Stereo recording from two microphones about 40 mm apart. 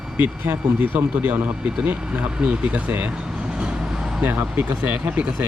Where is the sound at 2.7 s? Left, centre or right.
Right.